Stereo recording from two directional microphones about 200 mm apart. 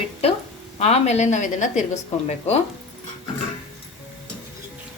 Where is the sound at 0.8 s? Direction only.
35° left (ahead or behind).